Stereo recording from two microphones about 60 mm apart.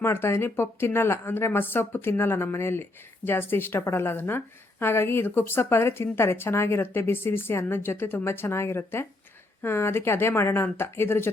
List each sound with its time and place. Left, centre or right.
0.0 s a woman's voice: left